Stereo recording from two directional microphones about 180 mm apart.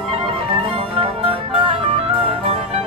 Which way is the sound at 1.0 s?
30° right (ahead or behind).